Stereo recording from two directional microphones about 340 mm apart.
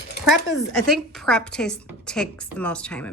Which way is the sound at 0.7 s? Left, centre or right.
Centre.